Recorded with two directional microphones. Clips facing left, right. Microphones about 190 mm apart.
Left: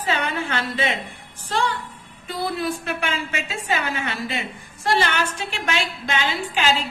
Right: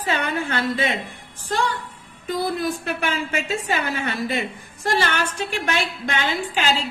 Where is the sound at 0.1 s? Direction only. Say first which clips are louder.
Right 1 dB; 45° right (ahead or behind).